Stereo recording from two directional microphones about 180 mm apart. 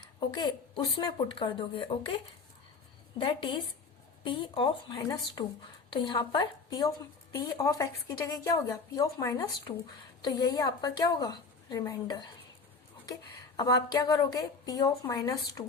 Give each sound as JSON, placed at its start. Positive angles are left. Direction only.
{"t": 0.3, "sound": "a woman's voice", "side_deg": 25}
{"t": 3.2, "sound": "a woman's voice", "side_deg": 30}
{"t": 5.0, "sound": "a woman's voice", "side_deg": 20}
{"t": 13.6, "sound": "a woman's voice", "side_deg": 25}